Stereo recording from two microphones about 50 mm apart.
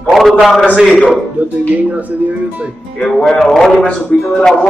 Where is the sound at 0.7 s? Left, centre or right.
Centre.